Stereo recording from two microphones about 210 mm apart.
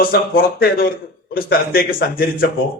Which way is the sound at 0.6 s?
45° left (ahead or behind).